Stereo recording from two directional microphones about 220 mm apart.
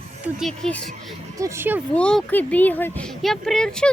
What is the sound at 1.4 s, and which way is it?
Speech, 10° right (ahead or behind).